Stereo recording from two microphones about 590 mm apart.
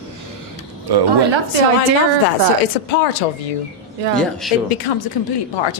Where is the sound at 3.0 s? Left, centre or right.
Left.